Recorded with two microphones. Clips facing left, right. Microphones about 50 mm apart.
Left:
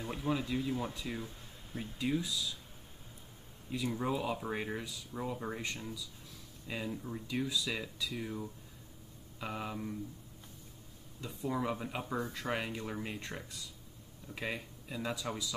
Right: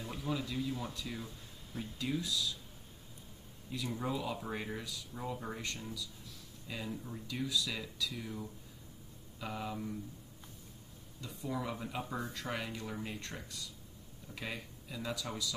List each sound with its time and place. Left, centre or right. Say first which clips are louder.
0.0 s speech: left 3 dB; left
3.7 s speech: left 3 dB; centre
9.4 s speech: left 1 dB; centre
11.1 s speech: left 3 dB; left
12.1 s speech: left 3 dB; centre
12.4 s speech: left 3 dB; left